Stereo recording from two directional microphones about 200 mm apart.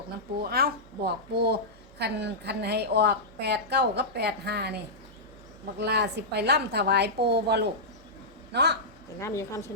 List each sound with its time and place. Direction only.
0.5 s a woman's voice: 50° right (ahead or behind)
5.8 s a woman's voice: 55° right (ahead or behind)
9.2 s speech: 15° left (ahead or behind)